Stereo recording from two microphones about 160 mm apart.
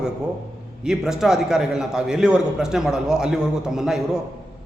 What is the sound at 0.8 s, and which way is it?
A man's voice, 5° right (ahead or behind).